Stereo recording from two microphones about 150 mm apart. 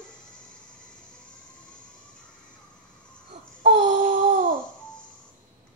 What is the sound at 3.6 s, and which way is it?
Babbling, 55° right (ahead or behind).